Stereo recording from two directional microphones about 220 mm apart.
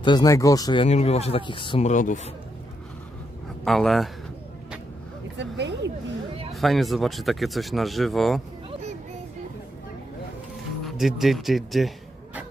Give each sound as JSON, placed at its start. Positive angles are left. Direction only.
{"t": 0.0, "sound": "speech", "side_deg": 20}
{"t": 0.8, "sound": "speech", "side_deg": 30}
{"t": 3.6, "sound": "speech", "side_deg": 0}
{"t": 5.4, "sound": "speech", "side_deg": -50}
{"t": 6.5, "sound": "speech", "side_deg": 0}
{"t": 11.0, "sound": "speech", "side_deg": 0}